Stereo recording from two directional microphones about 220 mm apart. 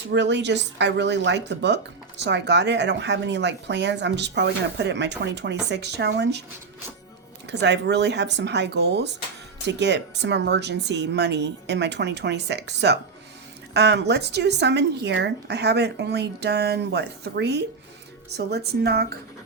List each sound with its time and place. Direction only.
0.1 s speech: 55° right (ahead or behind)
7.4 s speech: 50° right (ahead or behind)